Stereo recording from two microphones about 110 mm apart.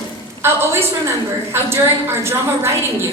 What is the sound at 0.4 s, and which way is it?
Speech, 20° right (ahead or behind).